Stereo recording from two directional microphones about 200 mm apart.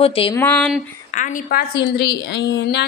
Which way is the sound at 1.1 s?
40° left (ahead or behind).